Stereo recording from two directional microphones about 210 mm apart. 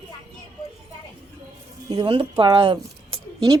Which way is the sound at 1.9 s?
20° right (ahead or behind).